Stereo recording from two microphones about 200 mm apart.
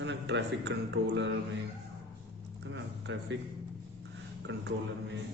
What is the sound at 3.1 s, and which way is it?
Speech, 65° right (ahead or behind).